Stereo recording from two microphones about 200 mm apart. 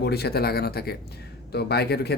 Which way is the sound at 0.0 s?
55° left (ahead or behind).